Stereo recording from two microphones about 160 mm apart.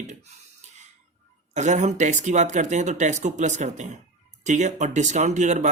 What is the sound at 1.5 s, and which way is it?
Speech, 50° right (ahead or behind).